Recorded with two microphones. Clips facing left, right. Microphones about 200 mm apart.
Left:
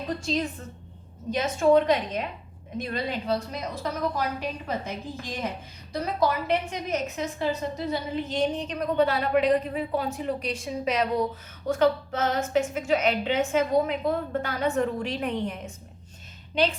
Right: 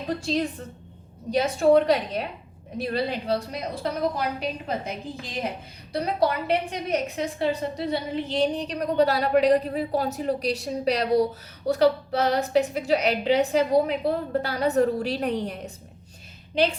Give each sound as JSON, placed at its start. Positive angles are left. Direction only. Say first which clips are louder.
{"t": 0.2, "sound": "a woman's voice", "louder": "right 2 dB", "side_deg": -35}